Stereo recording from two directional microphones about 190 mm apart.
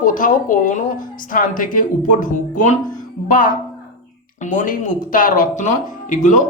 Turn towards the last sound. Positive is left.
turn(degrees=40)  # may be behind; listen again after turning